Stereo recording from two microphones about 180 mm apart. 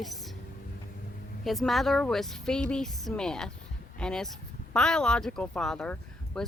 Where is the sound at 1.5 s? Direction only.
Centre (ahead or behind).